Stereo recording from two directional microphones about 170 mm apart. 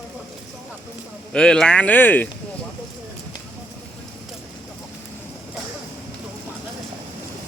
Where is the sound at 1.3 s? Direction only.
5° left (ahead or behind).